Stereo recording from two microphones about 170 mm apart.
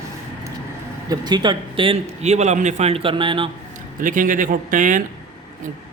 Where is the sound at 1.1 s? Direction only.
25° right (ahead or behind).